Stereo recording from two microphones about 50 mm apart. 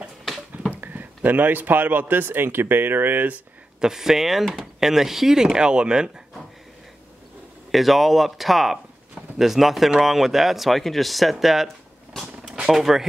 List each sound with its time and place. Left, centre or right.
0.7 s speech: right
3.8 s speech: centre
7.7 s speech: centre
12.4 s a sound: centre
12.7 s speech: centre